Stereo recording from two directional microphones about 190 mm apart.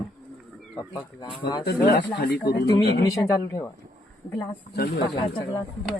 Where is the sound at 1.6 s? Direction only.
60° left (ahead or behind).